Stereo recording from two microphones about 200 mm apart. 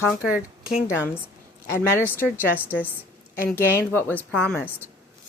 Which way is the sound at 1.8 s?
10° left (ahead or behind).